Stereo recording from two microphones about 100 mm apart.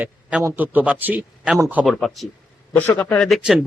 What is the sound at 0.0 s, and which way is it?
A man's voice, 10° right (ahead or behind).